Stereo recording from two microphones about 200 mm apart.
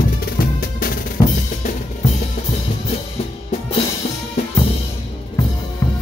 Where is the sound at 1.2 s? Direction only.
20° left (ahead or behind).